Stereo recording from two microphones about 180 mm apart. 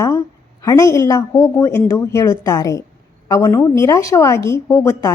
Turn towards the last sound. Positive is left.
turn(degrees=20)  # may be behind; listen again after turning